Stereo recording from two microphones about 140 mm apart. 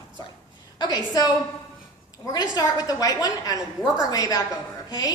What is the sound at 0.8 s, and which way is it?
Speech, 25° left (ahead or behind).